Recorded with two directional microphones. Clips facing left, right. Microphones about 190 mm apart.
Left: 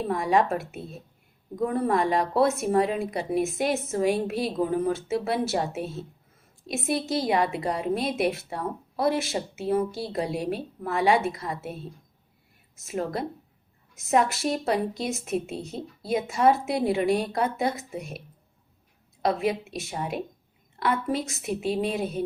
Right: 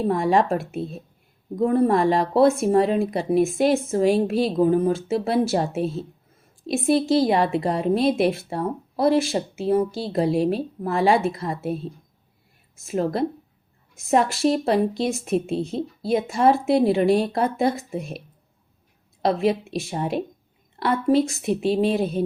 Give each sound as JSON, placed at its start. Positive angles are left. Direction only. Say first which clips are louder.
{"t": 0.1, "sound": "a woman's voice", "louder": "right 2 dB", "side_deg": -30}
{"t": 12.7, "sound": "a woman's voice", "louder": "right 6 dB", "side_deg": -30}
{"t": 19.2, "sound": "a woman's voice", "louder": "right 4 dB", "side_deg": -30}